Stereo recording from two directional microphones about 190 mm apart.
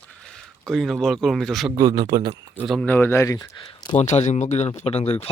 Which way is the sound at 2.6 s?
5° left (ahead or behind).